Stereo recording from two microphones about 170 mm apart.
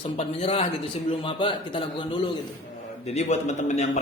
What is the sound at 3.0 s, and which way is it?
Speech, 40° left (ahead or behind).